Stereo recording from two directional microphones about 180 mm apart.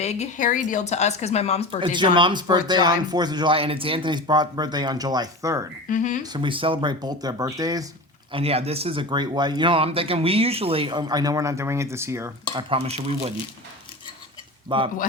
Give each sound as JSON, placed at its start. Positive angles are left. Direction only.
{"t": 0.0, "sound": "speech", "side_deg": 40}
{"t": 1.8, "sound": "speech", "side_deg": -25}
{"t": 5.9, "sound": "speech", "side_deg": 45}
{"t": 6.2, "sound": "speech", "side_deg": -25}
{"t": 8.3, "sound": "speech", "side_deg": -30}
{"t": 12.6, "sound": "speech", "side_deg": -30}
{"t": 14.7, "sound": "speech", "side_deg": -25}